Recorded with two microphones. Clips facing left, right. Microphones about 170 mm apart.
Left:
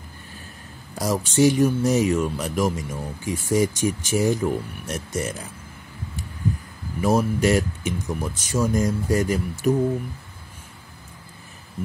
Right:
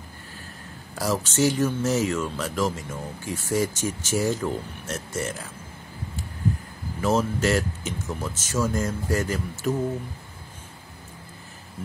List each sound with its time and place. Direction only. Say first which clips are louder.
0.9 s speech: left 3 dB; 15° left (ahead or behind)
7.0 s speech: left 3 dB; 15° left (ahead or behind)